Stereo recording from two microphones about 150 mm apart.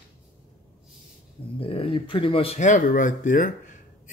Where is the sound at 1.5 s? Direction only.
40° left (ahead or behind).